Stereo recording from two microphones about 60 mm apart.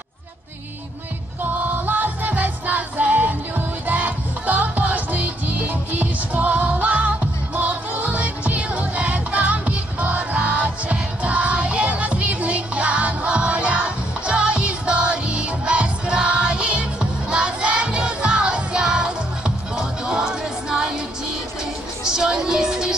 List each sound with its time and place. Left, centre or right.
1.4 s music: right; by 20.9 s centre
22.0 s music: centre